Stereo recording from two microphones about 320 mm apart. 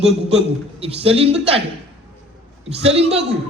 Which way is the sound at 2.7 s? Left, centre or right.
Centre.